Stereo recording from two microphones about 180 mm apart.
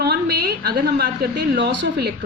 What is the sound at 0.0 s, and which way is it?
A woman's voice, 65° right (ahead or behind).